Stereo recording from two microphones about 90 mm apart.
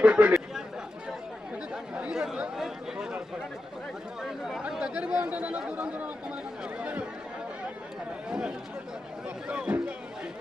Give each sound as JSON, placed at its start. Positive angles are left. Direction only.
{"t": 0.0, "sound": "speech", "side_deg": -15}
{"t": 1.7, "sound": "speech", "side_deg": -10}
{"t": 8.3, "sound": "speech", "side_deg": -5}